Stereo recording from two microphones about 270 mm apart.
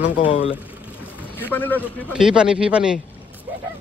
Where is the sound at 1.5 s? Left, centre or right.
Centre.